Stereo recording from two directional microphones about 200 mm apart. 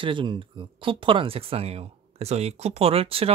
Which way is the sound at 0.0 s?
25° right (ahead or behind).